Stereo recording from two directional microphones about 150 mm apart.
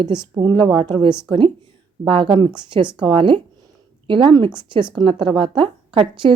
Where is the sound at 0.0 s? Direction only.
30° right (ahead or behind).